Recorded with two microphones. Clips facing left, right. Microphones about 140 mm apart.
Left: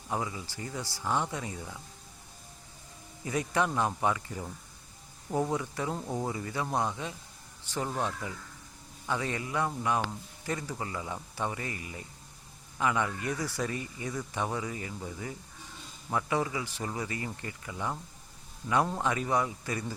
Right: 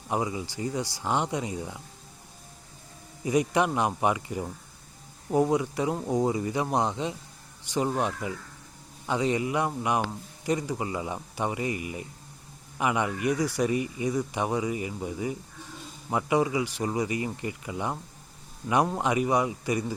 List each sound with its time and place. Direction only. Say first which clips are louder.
0.1 s a man's voice: right 5 dB; 20° right (ahead or behind)
3.2 s a man's voice: right 6 dB; 15° right (ahead or behind)